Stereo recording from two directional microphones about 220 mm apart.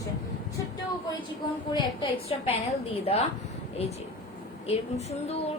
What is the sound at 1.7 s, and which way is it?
A woman's voice, 25° left (ahead or behind).